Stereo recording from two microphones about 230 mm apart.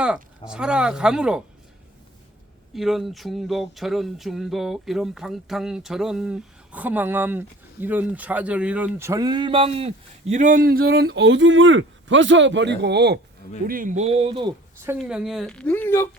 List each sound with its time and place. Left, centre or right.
0.0 s speech: centre
2.7 s speech: centre; by 13.1 s right
13.7 s speech: right
14.9 s speech: centre